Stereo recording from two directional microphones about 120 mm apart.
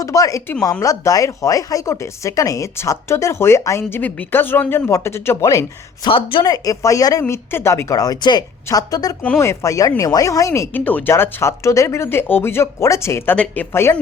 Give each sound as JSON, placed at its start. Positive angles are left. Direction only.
{"t": 0.0, "sound": "speech", "side_deg": 30}
{"t": 6.1, "sound": "a woman's voice", "side_deg": 45}
{"t": 6.4, "sound": "speech", "side_deg": 30}
{"t": 10.8, "sound": "speech", "side_deg": 10}
{"t": 13.3, "sound": "speech", "side_deg": 10}